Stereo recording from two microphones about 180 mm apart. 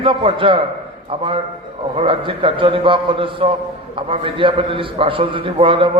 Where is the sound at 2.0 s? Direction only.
30° right (ahead or behind).